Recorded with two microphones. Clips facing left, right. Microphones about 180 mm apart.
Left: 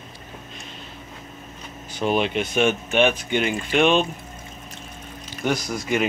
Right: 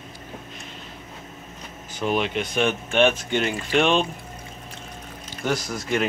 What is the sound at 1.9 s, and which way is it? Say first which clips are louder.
Speech: left 2 dB; 25° left (ahead or behind).